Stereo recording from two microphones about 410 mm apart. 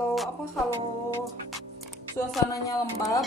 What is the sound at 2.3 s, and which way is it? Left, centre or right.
Speech, centre.